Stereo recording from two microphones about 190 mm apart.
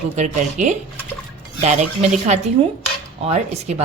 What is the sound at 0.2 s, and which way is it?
A woman's voice, 40° right (ahead or behind).